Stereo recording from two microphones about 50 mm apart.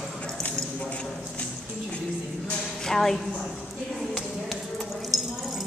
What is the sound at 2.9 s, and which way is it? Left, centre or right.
Speech, centre.